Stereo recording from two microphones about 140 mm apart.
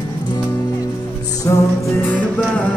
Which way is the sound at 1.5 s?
20° left (ahead or behind).